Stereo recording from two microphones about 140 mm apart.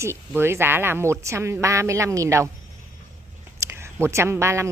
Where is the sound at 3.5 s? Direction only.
20° right (ahead or behind).